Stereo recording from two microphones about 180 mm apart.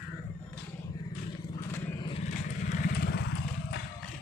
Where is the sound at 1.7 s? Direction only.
10° left (ahead or behind).